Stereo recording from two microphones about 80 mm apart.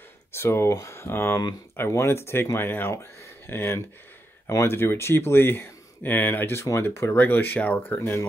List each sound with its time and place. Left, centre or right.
0.3 s speech: left